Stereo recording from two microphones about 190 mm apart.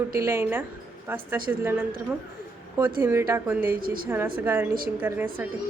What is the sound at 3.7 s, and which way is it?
Speech, 50° right (ahead or behind).